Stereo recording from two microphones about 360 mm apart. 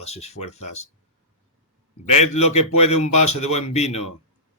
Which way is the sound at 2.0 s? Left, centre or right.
Centre.